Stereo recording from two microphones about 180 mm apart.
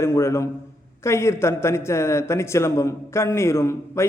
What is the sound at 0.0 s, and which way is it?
Speech, 15° left (ahead or behind).